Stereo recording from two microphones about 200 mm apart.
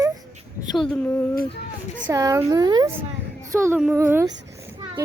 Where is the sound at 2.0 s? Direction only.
15° right (ahead or behind).